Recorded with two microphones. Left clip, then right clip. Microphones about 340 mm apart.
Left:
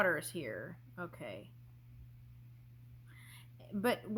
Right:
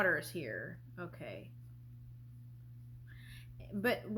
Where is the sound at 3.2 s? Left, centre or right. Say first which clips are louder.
Even; left.